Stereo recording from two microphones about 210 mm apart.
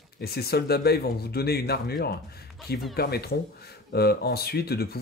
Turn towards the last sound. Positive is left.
turn(degrees=50)  # may be behind; listen again after turning